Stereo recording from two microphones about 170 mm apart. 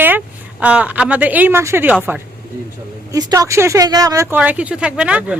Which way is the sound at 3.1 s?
20° right (ahead or behind).